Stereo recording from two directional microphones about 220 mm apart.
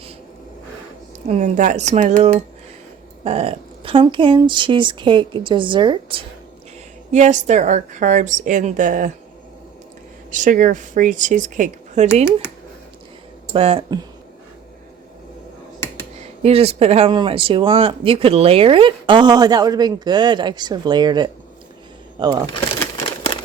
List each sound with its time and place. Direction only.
1.3 s a woman's voice: 35° right (ahead or behind)
7.1 s a woman's voice: 30° right (ahead or behind)
10.3 s a woman's voice: 35° right (ahead or behind)
13.5 s speech: 25° right (ahead or behind)
16.4 s speech: 25° right (ahead or behind)